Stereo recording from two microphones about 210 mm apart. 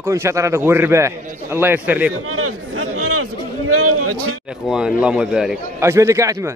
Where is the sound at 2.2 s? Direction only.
90° right.